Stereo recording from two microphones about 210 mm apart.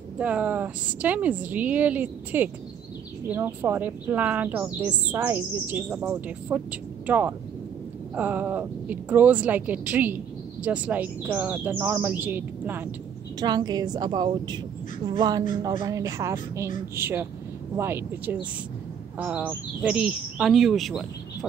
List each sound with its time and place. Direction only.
0.2 s speech: 5° right (ahead or behind)
13.4 s a woman's voice: 20° right (ahead or behind); by 21.5 s centre (ahead or behind)